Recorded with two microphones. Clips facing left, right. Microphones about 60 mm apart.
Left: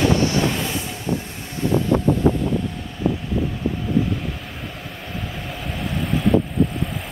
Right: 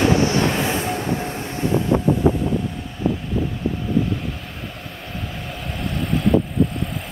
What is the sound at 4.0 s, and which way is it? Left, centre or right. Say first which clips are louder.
Vehicle: even; centre.